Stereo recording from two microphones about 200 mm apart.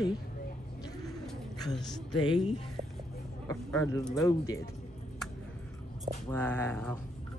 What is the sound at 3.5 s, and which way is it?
Speech, 15° left (ahead or behind).